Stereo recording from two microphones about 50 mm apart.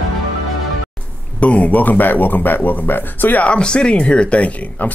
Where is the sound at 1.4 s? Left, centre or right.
Left.